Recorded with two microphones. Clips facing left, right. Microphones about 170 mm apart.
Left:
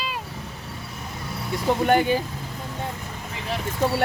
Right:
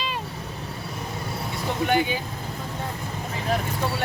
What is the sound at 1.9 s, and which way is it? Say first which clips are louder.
Speech: left 3 dB; 45° left (ahead or behind).